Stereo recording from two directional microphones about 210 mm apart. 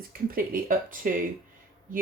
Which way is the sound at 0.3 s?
45° right (ahead or behind).